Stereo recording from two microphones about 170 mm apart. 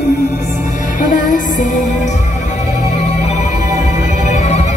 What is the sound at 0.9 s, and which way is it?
Music, 50° left (ahead or behind).